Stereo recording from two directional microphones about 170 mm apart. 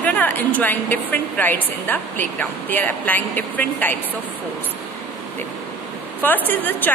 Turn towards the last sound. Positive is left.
turn(degrees=10)  # may be behind; listen again after turning